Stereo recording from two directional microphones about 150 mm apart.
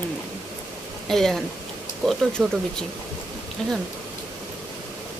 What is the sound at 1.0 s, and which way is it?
Speech, centre (ahead or behind).